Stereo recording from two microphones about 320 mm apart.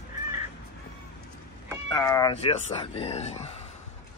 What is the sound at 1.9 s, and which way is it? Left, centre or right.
Speech, centre.